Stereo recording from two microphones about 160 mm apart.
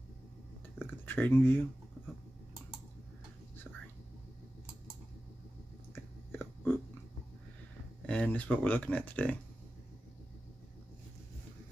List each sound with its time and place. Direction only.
0.8 s speech: 10° left (ahead or behind)
5.9 s a sound: 10° left (ahead or behind)
8.1 s speech: 10° left (ahead or behind)